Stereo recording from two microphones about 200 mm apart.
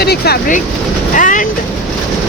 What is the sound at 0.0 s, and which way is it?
Speech, 50° left (ahead or behind).